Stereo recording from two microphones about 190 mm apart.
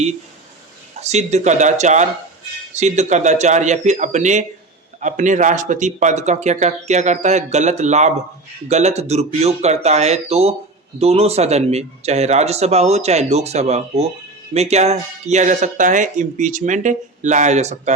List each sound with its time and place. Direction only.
1.0 s speech: 35° right (ahead or behind)